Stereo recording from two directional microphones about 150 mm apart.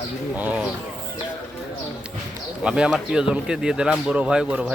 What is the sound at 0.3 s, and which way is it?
Speech, 10° right (ahead or behind).